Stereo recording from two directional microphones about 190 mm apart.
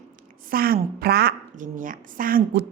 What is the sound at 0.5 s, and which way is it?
A woman's voice, 50° right (ahead or behind).